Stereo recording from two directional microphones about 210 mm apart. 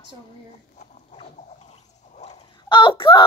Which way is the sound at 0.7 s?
30° left (ahead or behind).